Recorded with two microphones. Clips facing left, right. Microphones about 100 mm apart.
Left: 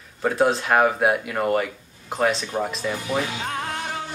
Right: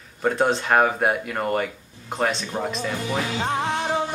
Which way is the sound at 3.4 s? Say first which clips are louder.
Right 5 dB; 25° right (ahead or behind).